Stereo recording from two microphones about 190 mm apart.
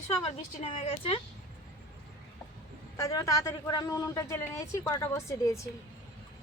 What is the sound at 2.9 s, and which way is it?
A woman's voice, 15° left (ahead or behind).